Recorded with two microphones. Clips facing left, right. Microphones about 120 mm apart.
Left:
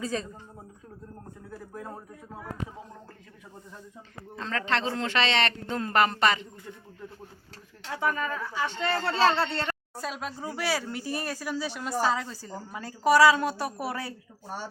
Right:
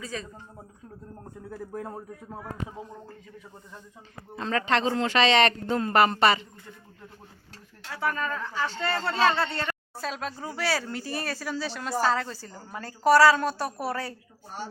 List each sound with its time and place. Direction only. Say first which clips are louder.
0.0 s speech: left 5 dB; 30° left (ahead or behind)
4.4 s speech: right 4 dB; 10° right (ahead or behind)
7.9 s speech: left 1 dB; 20° left (ahead or behind)
9.0 s speech: even; 30° left (ahead or behind)
9.6 s speech: right 1 dB; 10° left (ahead or behind)